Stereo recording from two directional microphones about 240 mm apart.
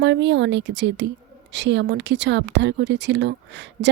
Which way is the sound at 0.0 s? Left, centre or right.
Right.